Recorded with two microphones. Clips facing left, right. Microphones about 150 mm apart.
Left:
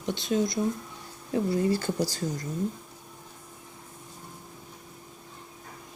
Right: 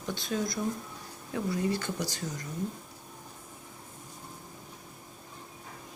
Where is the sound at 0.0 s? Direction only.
25° left (ahead or behind).